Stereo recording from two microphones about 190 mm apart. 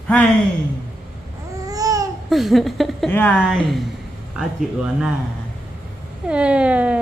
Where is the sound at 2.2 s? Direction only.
Centre (ahead or behind).